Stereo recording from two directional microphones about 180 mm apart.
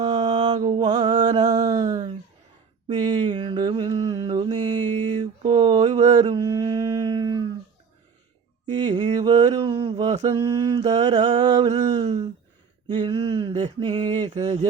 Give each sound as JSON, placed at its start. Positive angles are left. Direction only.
{"t": 0.0, "sound": "mantra", "side_deg": -25}
{"t": 0.8, "sound": "music", "side_deg": -25}
{"t": 2.9, "sound": "mantra", "side_deg": -25}
{"t": 8.7, "sound": "mantra", "side_deg": -25}
{"t": 10.4, "sound": "a sound", "side_deg": -20}